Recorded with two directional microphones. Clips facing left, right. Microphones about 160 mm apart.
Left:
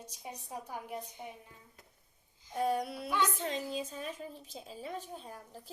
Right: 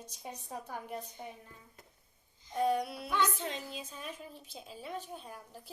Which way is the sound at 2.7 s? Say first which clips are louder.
Right 1 dB; 45° left (ahead or behind).